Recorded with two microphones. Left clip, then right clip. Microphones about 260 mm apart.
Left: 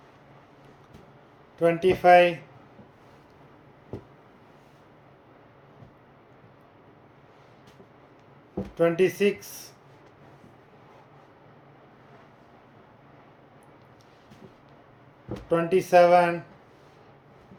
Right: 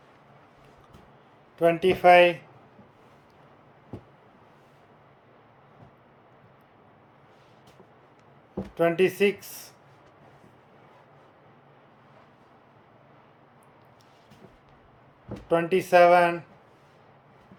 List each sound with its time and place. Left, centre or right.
1.5 s speech: centre
8.7 s speech: centre
15.4 s speech: centre